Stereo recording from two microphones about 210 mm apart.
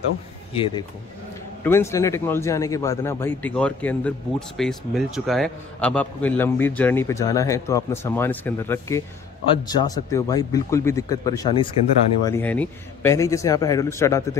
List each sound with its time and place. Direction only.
1.6 s a man's voice: 10° left (ahead or behind)